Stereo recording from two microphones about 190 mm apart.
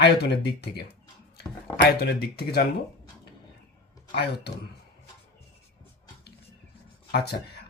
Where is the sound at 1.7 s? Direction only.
55° left (ahead or behind).